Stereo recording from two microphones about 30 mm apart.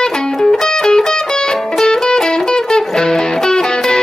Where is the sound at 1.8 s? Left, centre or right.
Left.